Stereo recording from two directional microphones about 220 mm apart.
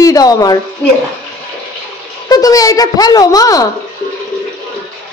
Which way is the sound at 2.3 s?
15° left (ahead or behind).